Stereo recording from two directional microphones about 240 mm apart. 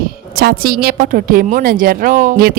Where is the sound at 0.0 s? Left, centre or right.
Right.